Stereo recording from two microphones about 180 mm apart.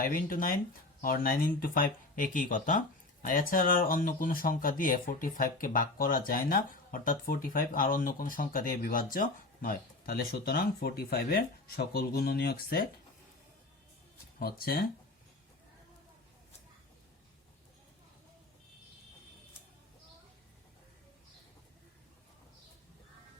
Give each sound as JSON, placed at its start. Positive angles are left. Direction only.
{"t": 0.0, "sound": "speech", "side_deg": 50}
{"t": 14.3, "sound": "speech", "side_deg": 55}